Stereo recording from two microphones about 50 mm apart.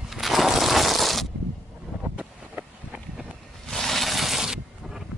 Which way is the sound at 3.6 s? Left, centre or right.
Centre.